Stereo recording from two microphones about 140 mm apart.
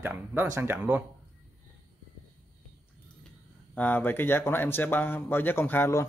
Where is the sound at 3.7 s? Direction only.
10° left (ahead or behind).